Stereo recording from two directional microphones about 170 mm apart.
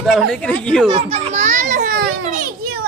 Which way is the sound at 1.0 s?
45° right (ahead or behind).